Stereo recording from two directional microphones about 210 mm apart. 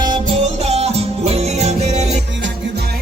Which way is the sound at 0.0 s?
25° right (ahead or behind).